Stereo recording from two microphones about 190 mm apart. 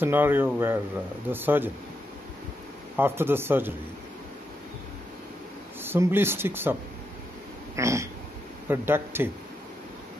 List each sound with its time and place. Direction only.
0.0 s speech: 10° right (ahead or behind)
3.0 s speech: 10° right (ahead or behind)
5.8 s speech: 10° right (ahead or behind)
7.7 s a sound: 15° right (ahead or behind)
8.6 s speech: 10° right (ahead or behind)